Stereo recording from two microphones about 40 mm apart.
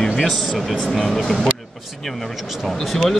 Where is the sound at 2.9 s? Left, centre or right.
Centre.